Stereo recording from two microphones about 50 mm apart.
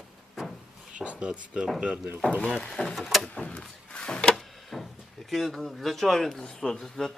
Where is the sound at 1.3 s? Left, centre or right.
Centre.